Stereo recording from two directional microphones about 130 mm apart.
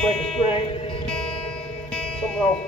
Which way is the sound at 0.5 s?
50° left (ahead or behind).